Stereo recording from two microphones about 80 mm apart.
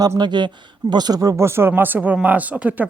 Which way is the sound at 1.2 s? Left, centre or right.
Right.